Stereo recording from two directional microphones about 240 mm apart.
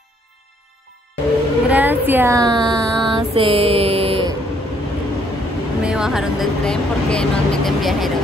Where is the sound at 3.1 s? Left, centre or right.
Right.